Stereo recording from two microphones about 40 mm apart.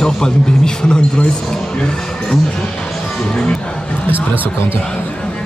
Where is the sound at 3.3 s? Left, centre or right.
Left.